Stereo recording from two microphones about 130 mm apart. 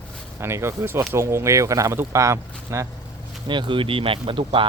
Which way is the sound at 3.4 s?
35° right (ahead or behind).